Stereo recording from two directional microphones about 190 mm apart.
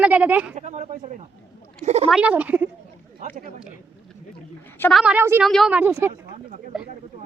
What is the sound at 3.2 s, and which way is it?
Speech, 40° right (ahead or behind).